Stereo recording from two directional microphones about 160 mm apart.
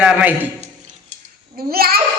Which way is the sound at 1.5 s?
70° right (ahead or behind).